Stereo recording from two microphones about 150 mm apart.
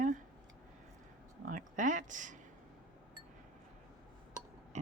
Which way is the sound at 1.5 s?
60° right (ahead or behind).